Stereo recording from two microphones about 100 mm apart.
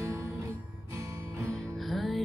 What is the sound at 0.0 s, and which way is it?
Music, 30° right (ahead or behind).